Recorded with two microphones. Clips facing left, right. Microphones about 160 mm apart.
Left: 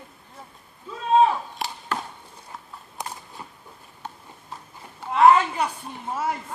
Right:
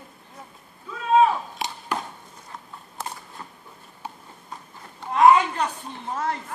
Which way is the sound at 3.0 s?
15° left (ahead or behind).